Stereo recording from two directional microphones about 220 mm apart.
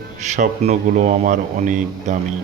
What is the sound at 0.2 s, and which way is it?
A man's voice, 35° right (ahead or behind).